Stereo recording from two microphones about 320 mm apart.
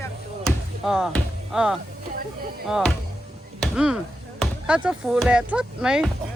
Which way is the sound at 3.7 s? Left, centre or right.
Centre.